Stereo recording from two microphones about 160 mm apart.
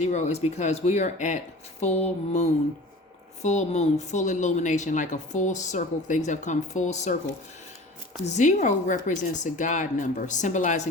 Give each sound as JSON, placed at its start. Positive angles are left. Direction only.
{"t": 0.0, "sound": "a woman's voice", "side_deg": 45}
{"t": 8.2, "sound": "a woman's voice", "side_deg": 45}